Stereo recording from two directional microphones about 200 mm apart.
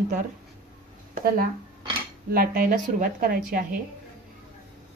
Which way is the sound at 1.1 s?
45° right (ahead or behind).